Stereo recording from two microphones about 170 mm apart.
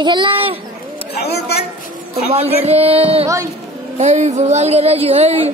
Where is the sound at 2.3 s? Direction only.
35° right (ahead or behind).